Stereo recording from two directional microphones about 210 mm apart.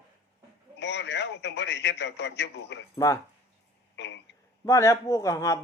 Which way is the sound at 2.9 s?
15° left (ahead or behind).